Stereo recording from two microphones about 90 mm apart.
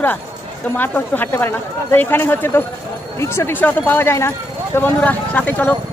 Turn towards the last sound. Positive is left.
turn(degrees=20)  # may be behind; listen again after turning